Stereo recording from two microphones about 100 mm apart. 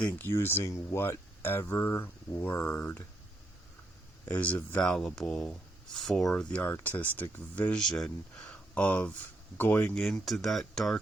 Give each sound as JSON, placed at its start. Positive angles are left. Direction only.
{"t": 0.0, "sound": "speech", "side_deg": 20}
{"t": 4.3, "sound": "speech", "side_deg": 15}
{"t": 4.8, "sound": "speech", "side_deg": 5}
{"t": 7.8, "sound": "speech", "side_deg": 5}
{"t": 9.9, "sound": "speech", "side_deg": 5}